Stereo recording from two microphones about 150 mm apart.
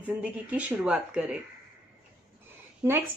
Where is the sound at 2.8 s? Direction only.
20° right (ahead or behind).